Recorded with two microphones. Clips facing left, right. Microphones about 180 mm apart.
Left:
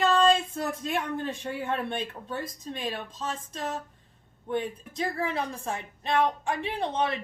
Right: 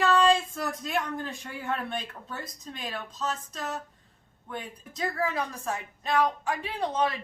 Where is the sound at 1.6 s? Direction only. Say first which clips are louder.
Left 1 dB; 25° left (ahead or behind).